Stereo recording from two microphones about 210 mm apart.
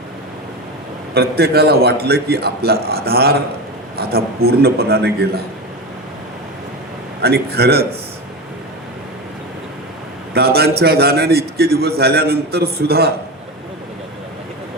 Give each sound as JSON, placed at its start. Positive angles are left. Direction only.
{"t": 1.1, "sound": "a man's voice", "side_deg": -50}
{"t": 7.2, "sound": "a man's voice", "side_deg": -50}
{"t": 10.3, "sound": "a man's voice", "side_deg": -50}